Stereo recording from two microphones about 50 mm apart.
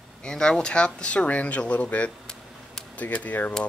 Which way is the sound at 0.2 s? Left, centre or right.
Centre.